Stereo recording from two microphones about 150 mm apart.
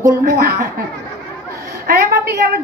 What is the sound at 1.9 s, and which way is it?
Speech, 90° right.